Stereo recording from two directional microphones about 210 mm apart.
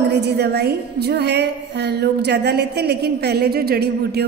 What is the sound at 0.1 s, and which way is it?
A woman's voice, 50° right (ahead or behind).